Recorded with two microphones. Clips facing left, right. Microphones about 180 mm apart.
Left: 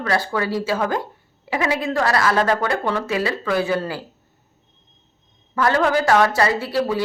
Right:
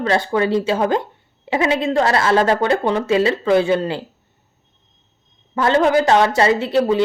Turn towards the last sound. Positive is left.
turn(degrees=-20)  # may be behind; listen again after turning